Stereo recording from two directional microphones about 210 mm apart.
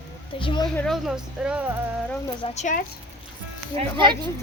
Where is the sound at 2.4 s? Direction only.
35° left (ahead or behind).